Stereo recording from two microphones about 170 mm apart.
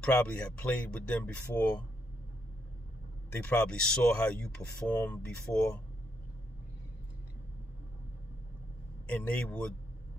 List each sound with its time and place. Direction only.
0.0 s speech: 10° left (ahead or behind)
3.4 s speech: 5° left (ahead or behind)
9.0 s speech: 10° left (ahead or behind)